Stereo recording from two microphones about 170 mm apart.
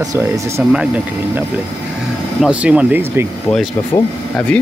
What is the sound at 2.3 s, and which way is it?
Speech, 5° right (ahead or behind).